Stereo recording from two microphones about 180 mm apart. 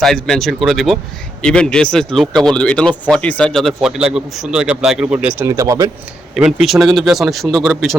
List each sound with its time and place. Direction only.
0.0 s speech: centre (ahead or behind)
5.4 s speech: 15° right (ahead or behind)
6.3 s speech: centre (ahead or behind)